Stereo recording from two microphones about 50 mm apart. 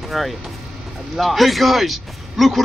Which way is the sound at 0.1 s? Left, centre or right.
Centre.